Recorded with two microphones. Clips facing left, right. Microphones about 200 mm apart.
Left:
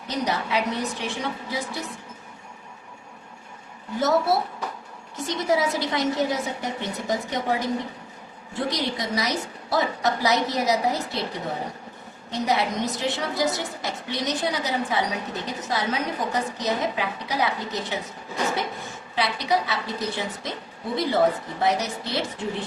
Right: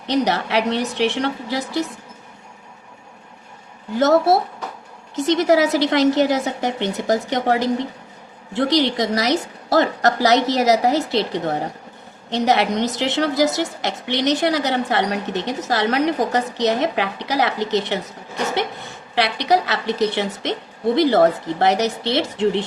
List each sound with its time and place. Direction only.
0.1 s a woman's voice: 75° right (ahead or behind)
3.9 s a woman's voice: 75° right (ahead or behind)
19.1 s a woman's voice: 80° right